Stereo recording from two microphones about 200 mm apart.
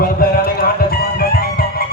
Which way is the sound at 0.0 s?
45° left (ahead or behind).